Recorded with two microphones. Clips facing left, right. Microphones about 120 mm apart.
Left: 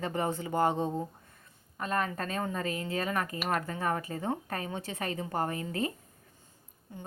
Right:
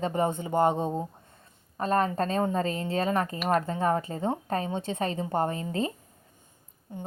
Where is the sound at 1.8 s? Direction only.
30° right (ahead or behind).